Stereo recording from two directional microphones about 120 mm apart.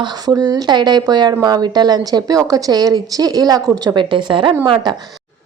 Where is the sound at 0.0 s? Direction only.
35° right (ahead or behind).